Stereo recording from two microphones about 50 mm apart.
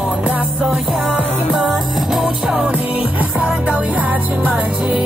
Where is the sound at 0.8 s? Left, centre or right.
Centre.